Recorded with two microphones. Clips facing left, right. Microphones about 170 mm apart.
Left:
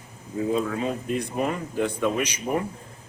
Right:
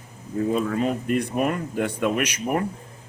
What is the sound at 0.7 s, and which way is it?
Speech, 65° right (ahead or behind).